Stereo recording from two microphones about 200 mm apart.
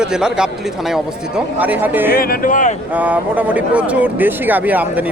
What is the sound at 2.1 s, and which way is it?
Speech, 50° left (ahead or behind).